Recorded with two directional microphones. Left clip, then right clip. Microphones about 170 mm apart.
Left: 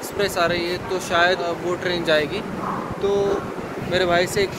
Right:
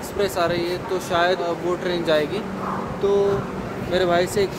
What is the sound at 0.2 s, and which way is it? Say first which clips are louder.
Speech: left 1 dB; 20° right (ahead or behind).